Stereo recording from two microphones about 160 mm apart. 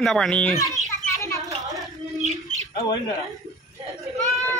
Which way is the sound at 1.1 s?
20° left (ahead or behind).